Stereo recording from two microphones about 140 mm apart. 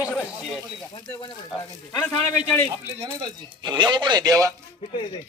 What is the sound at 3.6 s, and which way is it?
Speech, 35° right (ahead or behind).